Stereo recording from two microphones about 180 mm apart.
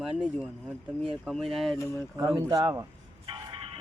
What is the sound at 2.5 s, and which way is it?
Speech, 20° right (ahead or behind).